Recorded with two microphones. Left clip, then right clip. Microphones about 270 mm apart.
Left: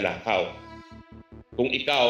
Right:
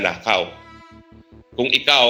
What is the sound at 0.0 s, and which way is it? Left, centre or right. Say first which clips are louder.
Speech: right 6 dB; right.